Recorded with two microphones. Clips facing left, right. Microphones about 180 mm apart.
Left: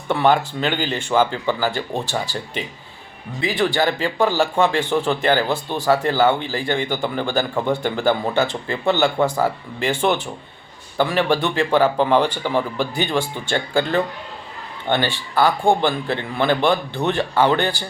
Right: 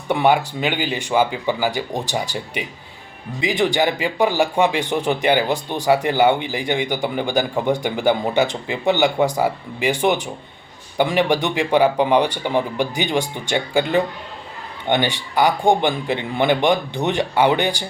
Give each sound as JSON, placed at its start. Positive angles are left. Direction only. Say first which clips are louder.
{"t": 0.1, "sound": "speech", "louder": "even", "side_deg": -15}